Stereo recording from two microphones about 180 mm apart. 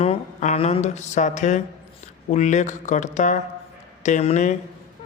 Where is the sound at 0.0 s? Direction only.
40° left (ahead or behind).